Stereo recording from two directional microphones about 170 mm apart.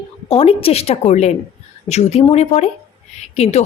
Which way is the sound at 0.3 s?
35° left (ahead or behind).